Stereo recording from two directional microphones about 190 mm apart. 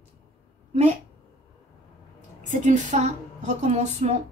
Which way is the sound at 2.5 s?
40° right (ahead or behind).